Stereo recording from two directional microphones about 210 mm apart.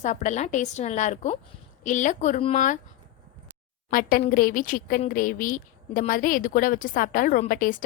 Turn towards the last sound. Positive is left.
turn(degrees=40)  # may be behind; listen again after turning